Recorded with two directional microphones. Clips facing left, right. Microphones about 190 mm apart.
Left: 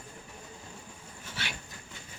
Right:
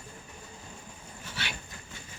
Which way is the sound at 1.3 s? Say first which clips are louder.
Right 1 dB; 45° left (ahead or behind).